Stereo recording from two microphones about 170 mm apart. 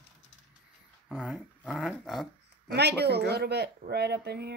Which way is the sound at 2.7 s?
75° right (ahead or behind).